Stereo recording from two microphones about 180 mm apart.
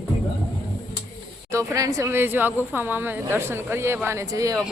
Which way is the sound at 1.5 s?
15° right (ahead or behind).